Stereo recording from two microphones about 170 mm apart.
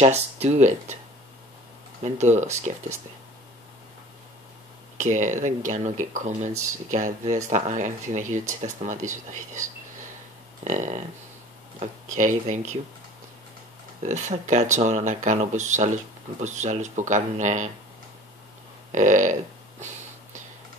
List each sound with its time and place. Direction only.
0.0 s speech: 40° right (ahead or behind)
2.0 s speech: 45° right (ahead or behind)
4.9 s speech: 45° right (ahead or behind)
14.0 s speech: 45° right (ahead or behind)
18.9 s speech: 45° right (ahead or behind)